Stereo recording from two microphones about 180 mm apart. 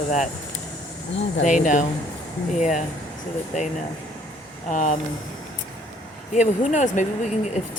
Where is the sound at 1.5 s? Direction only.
45° left (ahead or behind).